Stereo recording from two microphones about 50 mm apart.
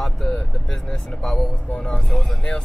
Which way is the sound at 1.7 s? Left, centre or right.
Left.